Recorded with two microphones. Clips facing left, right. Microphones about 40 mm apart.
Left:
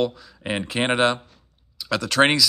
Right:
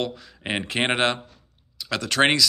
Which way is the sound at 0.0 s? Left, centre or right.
Right.